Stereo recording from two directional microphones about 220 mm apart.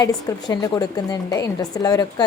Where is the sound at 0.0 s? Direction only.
20° left (ahead or behind).